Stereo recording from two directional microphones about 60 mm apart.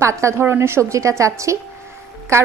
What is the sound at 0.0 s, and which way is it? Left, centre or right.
Speech, right.